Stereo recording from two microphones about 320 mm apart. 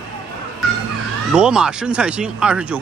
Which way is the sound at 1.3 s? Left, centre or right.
Centre.